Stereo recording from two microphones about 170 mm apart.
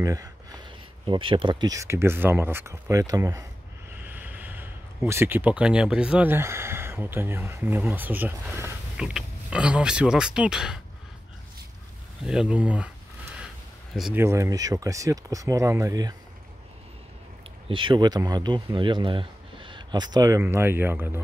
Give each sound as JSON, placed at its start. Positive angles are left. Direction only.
{"t": 0.0, "sound": "speech", "side_deg": -20}
{"t": 12.3, "sound": "speech", "side_deg": -5}
{"t": 14.1, "sound": "speech", "side_deg": -15}
{"t": 17.6, "sound": "speech", "side_deg": -30}